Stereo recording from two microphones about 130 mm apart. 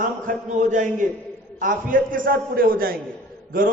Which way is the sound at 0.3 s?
70° right (ahead or behind).